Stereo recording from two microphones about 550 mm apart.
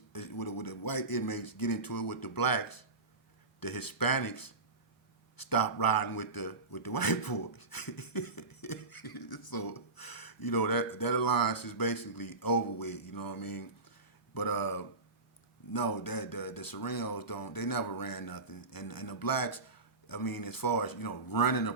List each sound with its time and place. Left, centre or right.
0.1 s a man's voice: left